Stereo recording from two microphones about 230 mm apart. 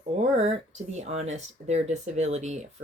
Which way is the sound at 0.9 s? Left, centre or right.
Right.